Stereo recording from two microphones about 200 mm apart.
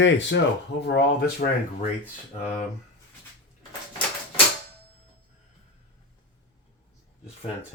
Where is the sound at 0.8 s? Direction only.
55° left (ahead or behind).